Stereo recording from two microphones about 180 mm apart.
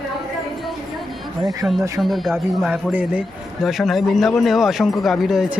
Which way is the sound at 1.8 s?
20° right (ahead or behind).